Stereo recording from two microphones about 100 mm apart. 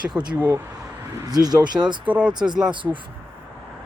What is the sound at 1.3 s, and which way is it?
Speech, 40° right (ahead or behind).